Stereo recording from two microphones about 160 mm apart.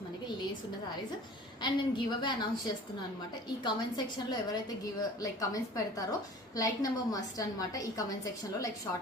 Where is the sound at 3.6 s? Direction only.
25° left (ahead or behind).